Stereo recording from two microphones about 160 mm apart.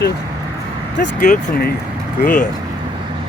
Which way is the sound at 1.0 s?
65° left (ahead or behind).